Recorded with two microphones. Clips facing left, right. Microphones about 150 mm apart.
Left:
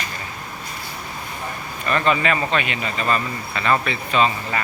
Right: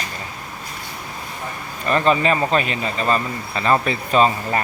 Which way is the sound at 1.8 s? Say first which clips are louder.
Right 3 dB; 35° right (ahead or behind).